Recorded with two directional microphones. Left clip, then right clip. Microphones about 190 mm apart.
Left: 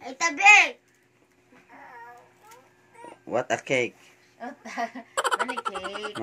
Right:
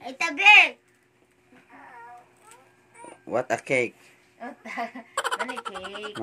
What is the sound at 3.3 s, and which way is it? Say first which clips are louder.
Speech: even; 5° right (ahead or behind).